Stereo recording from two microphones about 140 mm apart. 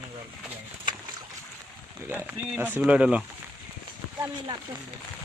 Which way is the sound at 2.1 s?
10° right (ahead or behind).